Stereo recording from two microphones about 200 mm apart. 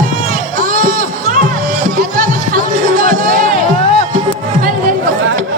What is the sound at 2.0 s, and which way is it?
Music, 45° right (ahead or behind).